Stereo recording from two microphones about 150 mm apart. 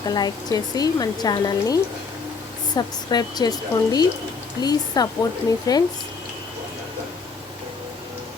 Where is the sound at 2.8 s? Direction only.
25° left (ahead or behind).